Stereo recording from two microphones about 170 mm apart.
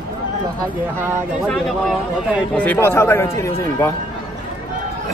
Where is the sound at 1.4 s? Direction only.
5° left (ahead or behind).